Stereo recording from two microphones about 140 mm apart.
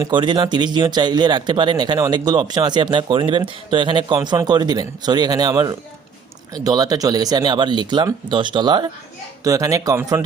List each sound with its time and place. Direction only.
0.1 s speech: 35° right (ahead or behind); by 10.2 s 20° right (ahead or behind)